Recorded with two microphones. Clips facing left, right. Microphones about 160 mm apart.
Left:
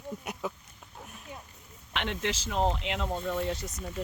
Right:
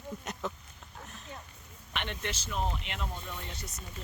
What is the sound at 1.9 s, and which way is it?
Speech, 90° left.